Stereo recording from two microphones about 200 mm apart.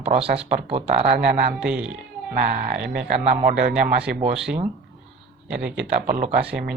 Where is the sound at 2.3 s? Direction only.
45° right (ahead or behind).